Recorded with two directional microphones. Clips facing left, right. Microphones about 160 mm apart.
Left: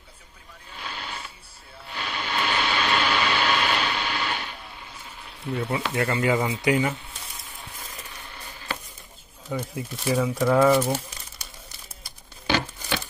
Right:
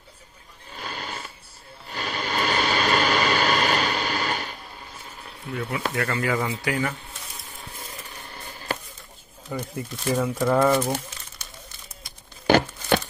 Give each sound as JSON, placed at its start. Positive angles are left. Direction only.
{"t": 0.7, "sound": "neigh", "side_deg": -45}
{"t": 1.9, "sound": "a sound", "side_deg": -45}
{"t": 5.9, "sound": "speech", "side_deg": 20}
{"t": 7.8, "sound": "a sound", "side_deg": -40}
{"t": 9.5, "sound": "speech", "side_deg": 5}
{"t": 12.4, "sound": "crumpling", "side_deg": -50}